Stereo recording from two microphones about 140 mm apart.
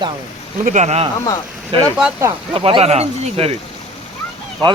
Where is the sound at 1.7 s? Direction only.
40° right (ahead or behind).